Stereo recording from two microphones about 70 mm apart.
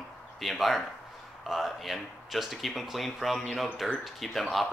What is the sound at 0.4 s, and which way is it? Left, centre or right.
A man's voice, centre.